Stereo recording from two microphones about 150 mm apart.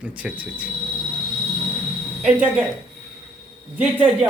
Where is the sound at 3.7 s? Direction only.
10° right (ahead or behind).